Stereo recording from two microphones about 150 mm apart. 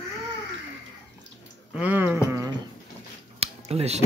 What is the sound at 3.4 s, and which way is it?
Scissors, 45° right (ahead or behind).